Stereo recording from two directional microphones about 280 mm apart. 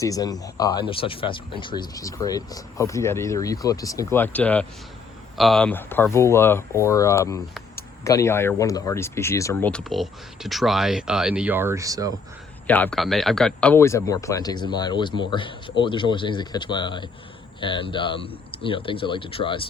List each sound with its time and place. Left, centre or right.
0.0 s speech: centre
12.6 s speech: centre